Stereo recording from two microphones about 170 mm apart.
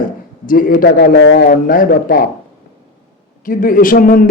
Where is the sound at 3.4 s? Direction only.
55° left (ahead or behind).